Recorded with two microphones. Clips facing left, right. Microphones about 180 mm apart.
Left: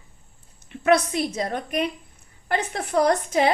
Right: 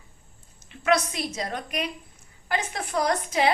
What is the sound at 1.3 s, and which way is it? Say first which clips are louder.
Speech: left 4 dB; 30° left (ahead or behind).